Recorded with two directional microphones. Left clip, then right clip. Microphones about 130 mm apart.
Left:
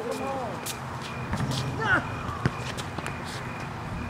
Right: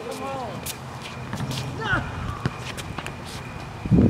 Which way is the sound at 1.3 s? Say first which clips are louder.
Even; centre (ahead or behind).